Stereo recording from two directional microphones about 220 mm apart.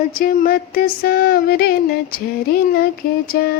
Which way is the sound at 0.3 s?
40° left (ahead or behind).